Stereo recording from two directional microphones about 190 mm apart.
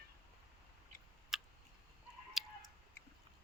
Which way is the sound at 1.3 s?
Centre (ahead or behind).